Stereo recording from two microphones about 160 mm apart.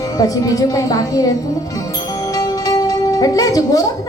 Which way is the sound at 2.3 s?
20° left (ahead or behind).